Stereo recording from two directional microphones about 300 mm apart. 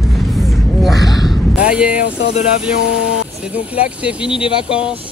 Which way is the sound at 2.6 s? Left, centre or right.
Centre.